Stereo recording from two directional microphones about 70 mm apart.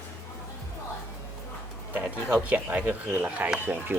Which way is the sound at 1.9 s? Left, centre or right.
Right.